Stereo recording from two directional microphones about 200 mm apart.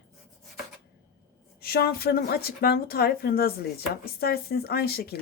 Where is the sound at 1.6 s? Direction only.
50° left (ahead or behind).